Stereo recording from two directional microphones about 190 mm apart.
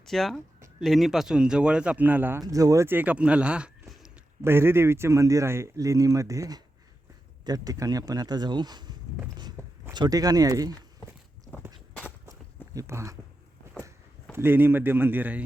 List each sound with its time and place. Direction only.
0.0 s speech: centre (ahead or behind); by 9.0 s 20° right (ahead or behind)
9.6 s a sound: 10° left (ahead or behind)
9.9 s speech: 20° right (ahead or behind)
12.7 s speech: 15° right (ahead or behind)
14.3 s speech: 10° right (ahead or behind)